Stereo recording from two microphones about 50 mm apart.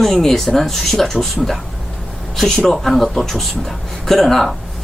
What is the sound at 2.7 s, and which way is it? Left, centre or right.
Speech, centre.